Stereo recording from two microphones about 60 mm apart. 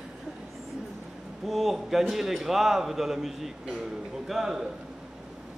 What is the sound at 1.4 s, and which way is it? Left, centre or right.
A man's voice, centre.